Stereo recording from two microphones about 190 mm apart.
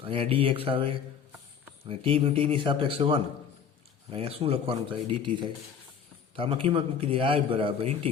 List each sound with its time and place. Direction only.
0.0 s a man's voice: 30° right (ahead or behind)